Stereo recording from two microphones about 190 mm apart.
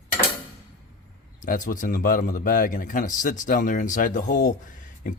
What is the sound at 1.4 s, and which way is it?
Speech, 45° left (ahead or behind).